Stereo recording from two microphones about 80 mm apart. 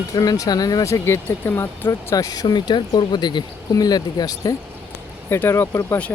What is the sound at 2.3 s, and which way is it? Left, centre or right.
Speech, left.